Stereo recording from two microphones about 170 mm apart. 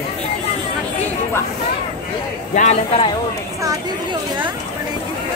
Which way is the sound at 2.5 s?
45° left (ahead or behind).